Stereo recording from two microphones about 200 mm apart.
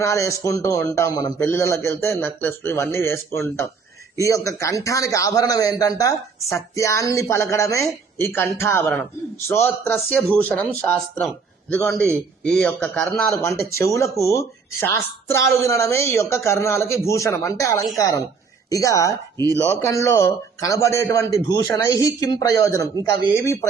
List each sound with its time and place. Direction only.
0.0 s a woman's voice: 15° left (ahead or behind)
13.7 s a woman's voice: 15° left (ahead or behind)